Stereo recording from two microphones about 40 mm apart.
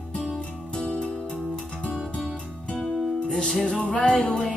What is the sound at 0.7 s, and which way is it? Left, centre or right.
Music, left.